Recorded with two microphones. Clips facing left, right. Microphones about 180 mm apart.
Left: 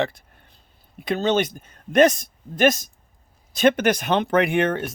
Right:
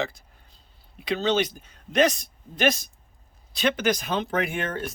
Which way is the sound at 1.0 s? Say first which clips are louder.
Left 3 dB; 50° left (ahead or behind).